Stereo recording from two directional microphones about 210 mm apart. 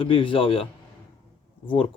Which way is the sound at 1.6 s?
25° left (ahead or behind).